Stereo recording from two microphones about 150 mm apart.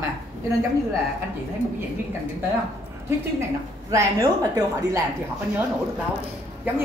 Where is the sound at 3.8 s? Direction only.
20° right (ahead or behind).